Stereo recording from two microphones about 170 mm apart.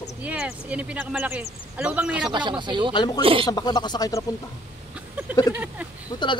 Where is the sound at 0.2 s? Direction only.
5° right (ahead or behind).